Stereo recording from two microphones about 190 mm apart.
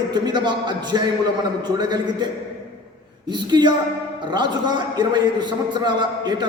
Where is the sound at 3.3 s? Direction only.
25° right (ahead or behind).